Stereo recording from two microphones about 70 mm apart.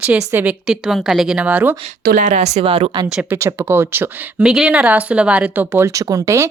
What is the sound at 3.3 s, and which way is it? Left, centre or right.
Speech, right.